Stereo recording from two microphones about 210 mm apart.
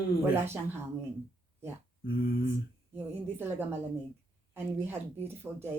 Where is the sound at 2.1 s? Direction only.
45° left (ahead or behind).